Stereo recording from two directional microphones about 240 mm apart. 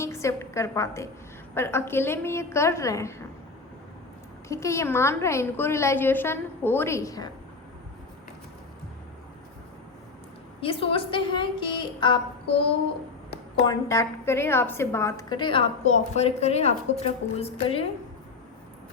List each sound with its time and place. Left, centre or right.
0.0 s a woman's voice: centre
4.4 s a woman's voice: centre
10.6 s a woman's voice: left
13.7 s a woman's voice: centre